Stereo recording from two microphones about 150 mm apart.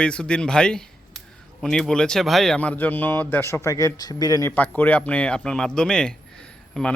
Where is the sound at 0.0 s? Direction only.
5° left (ahead or behind); by 4.5 s 25° left (ahead or behind).